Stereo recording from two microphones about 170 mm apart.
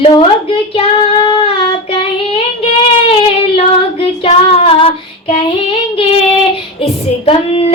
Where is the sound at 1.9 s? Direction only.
35° left (ahead or behind).